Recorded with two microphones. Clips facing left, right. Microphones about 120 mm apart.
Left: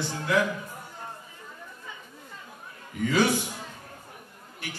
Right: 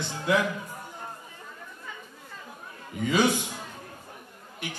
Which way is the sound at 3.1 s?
20° right (ahead or behind).